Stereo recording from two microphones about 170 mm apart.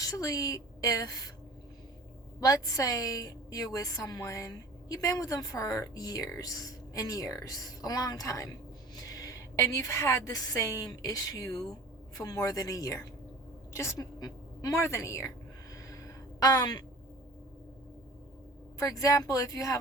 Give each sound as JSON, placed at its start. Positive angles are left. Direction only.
{"t": 0.0, "sound": "a woman's voice", "side_deg": 20}
{"t": 2.4, "sound": "a woman's voice", "side_deg": 20}
{"t": 15.7, "sound": "a sound", "side_deg": 20}
{"t": 18.8, "sound": "a woman's voice", "side_deg": 20}